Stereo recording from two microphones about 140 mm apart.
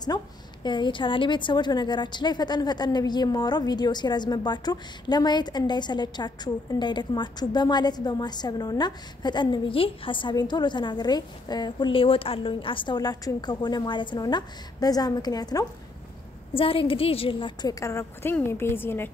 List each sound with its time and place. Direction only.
0.1 s a woman's voice: 30° left (ahead or behind)
16.5 s a woman's voice: 40° left (ahead or behind); by 19.0 s 15° left (ahead or behind)